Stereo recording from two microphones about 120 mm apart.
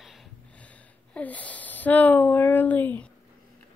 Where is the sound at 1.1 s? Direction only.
10° left (ahead or behind).